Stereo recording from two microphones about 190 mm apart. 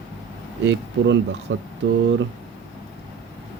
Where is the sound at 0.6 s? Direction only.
70° right (ahead or behind).